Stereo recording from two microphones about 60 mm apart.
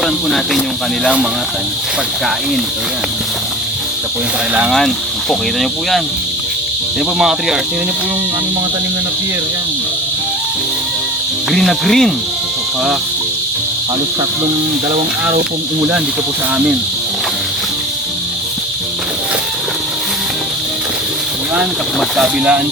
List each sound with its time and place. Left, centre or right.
0.0 s speech: centre
5.3 s speech: centre
7.2 s speech: centre
11.5 s speech: centre